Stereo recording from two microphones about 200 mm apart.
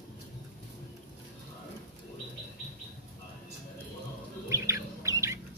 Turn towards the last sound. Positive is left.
turn(degrees=-15)  # may be behind; listen again after turning